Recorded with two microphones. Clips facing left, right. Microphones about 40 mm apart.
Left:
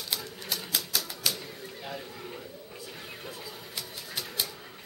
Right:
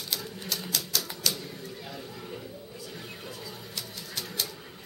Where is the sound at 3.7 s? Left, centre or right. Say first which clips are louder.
Left 1 dB; centre.